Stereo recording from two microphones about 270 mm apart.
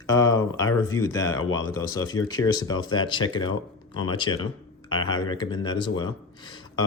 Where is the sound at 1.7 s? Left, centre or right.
Centre.